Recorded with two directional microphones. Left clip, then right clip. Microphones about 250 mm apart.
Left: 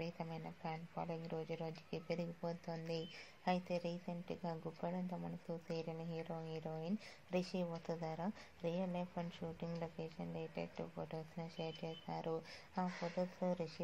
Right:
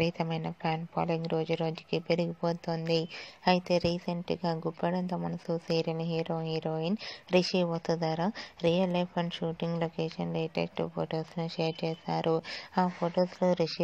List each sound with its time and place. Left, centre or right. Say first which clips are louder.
0.0 s speech: right 16 dB; right